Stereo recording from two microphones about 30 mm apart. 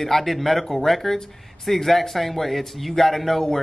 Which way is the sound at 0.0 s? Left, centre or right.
Centre.